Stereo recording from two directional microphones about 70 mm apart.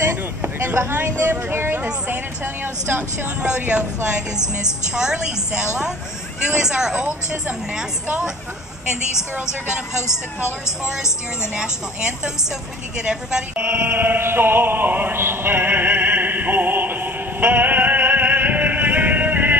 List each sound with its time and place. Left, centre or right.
0.4 s speech: right
3.4 s a woman's voice: centre
4.9 s a woman's voice: centre
13.0 s a woman's voice: centre
13.6 s music: right